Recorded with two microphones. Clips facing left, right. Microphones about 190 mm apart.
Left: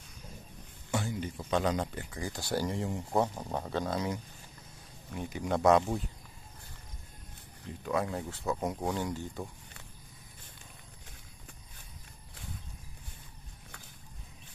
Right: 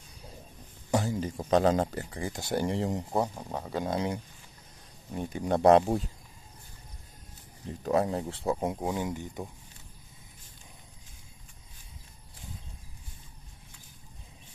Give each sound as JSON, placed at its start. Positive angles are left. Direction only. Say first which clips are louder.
{"t": 0.9, "sound": "speech", "louder": "right 5 dB", "side_deg": -40}
{"t": 2.2, "sound": "speech", "louder": "right 3 dB", "side_deg": -20}
{"t": 3.1, "sound": "speech", "louder": "even", "side_deg": -5}
{"t": 3.8, "sound": "speech", "louder": "right 3 dB", "side_deg": -30}
{"t": 7.8, "sound": "speech", "louder": "right 5 dB", "side_deg": -35}